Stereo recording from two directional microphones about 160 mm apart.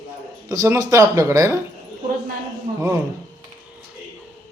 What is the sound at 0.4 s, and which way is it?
Speech, 20° right (ahead or behind).